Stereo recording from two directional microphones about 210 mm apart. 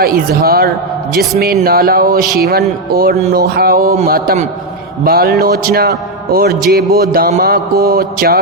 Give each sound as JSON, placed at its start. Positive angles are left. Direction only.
{"t": 0.0, "sound": "mantra", "side_deg": -45}